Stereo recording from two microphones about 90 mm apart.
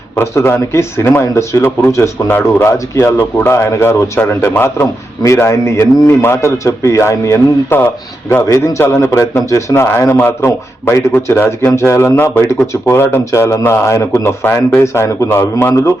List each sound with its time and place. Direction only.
0.2 s a man's voice: 30° left (ahead or behind)
2.7 s a man's voice: 35° left (ahead or behind)
5.2 s a man's voice: 35° left (ahead or behind)